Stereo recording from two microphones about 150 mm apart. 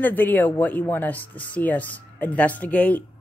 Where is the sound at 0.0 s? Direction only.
10° left (ahead or behind).